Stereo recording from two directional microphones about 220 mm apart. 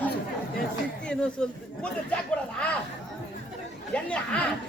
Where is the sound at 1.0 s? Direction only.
5° left (ahead or behind).